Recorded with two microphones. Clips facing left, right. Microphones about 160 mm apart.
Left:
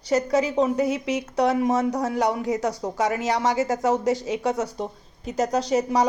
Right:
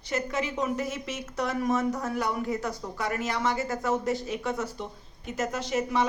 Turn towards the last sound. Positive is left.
turn(degrees=40)  # may be behind; listen again after turning